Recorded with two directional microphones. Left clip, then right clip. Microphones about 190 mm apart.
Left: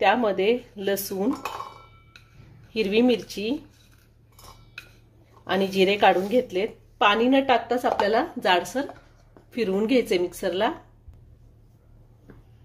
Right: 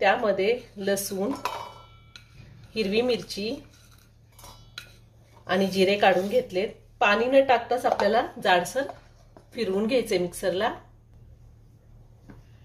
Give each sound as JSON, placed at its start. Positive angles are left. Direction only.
{"t": 0.0, "sound": "a woman's voice", "side_deg": 30}
{"t": 2.7, "sound": "a woman's voice", "side_deg": 35}
{"t": 5.5, "sound": "a woman's voice", "side_deg": 35}